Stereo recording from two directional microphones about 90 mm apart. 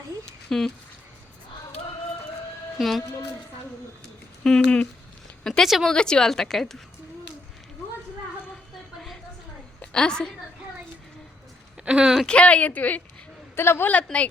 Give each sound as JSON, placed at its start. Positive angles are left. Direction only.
{"t": 0.5, "sound": "a woman's voice", "side_deg": 5}
{"t": 2.7, "sound": "speech", "side_deg": 0}
{"t": 4.4, "sound": "a woman's voice", "side_deg": 10}
{"t": 9.8, "sound": "a woman's voice", "side_deg": 10}
{"t": 11.9, "sound": "speech", "side_deg": -10}
{"t": 12.1, "sound": "a woman's voice", "side_deg": 10}